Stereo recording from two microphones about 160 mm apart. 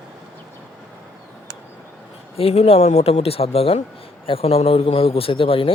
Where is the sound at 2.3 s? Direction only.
40° left (ahead or behind).